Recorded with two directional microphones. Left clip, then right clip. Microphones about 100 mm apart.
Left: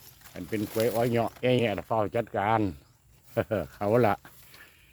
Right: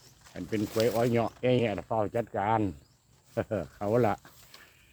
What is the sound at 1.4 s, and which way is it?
Speech, 40° left (ahead or behind).